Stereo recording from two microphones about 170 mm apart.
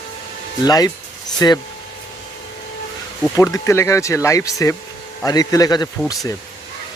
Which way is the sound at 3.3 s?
20° left (ahead or behind).